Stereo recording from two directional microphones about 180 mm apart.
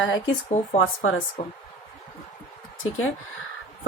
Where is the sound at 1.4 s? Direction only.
25° left (ahead or behind).